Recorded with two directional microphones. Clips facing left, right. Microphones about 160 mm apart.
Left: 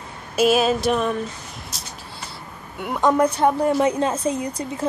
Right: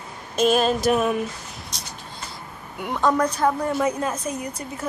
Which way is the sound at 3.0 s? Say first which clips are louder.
Left 3 dB; 25° left (ahead or behind).